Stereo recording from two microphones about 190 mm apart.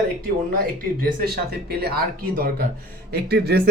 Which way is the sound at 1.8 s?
55° right (ahead or behind).